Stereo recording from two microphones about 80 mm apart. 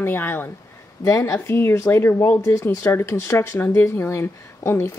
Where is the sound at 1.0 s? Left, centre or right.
Left.